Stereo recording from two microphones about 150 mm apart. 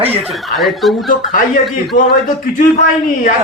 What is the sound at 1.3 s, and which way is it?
Speech, 65° left (ahead or behind).